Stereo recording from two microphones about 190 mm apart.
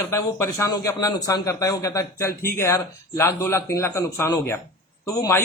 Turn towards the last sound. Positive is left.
turn(degrees=15)  # may be behind; listen again after turning